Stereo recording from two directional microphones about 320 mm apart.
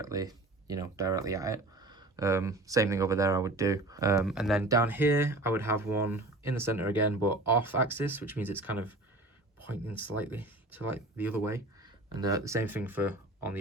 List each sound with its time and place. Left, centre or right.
0.0 s speech: centre